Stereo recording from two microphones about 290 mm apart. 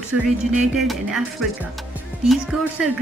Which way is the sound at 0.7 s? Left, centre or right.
Centre.